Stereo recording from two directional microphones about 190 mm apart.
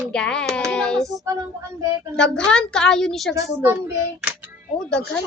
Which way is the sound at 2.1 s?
5° left (ahead or behind).